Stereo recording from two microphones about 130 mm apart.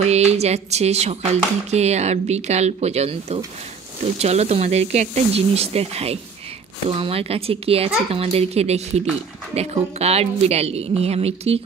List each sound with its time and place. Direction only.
0.0 s speech: 55° right (ahead or behind)